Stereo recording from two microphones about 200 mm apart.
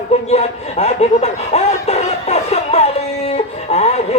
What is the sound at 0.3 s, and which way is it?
Speech, 35° left (ahead or behind).